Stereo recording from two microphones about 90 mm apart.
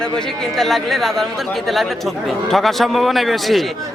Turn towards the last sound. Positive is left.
turn(degrees=0)  # may be behind; listen again after turning